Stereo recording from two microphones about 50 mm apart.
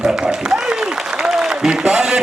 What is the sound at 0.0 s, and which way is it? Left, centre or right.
Applause, centre.